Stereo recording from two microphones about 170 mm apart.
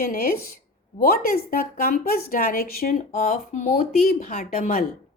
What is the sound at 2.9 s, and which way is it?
Speech, 40° left (ahead or behind).